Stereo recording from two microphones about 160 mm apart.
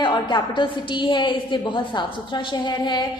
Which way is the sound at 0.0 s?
30° left (ahead or behind).